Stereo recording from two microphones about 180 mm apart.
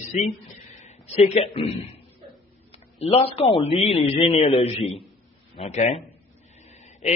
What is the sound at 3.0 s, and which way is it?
A man's voice, 35° left (ahead or behind).